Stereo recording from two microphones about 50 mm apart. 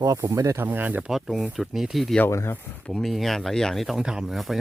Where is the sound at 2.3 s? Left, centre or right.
Left.